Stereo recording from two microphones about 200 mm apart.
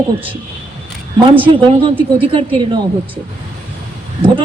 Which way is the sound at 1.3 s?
25° right (ahead or behind).